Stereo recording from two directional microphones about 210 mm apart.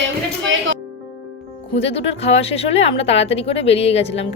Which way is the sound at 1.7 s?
30° left (ahead or behind).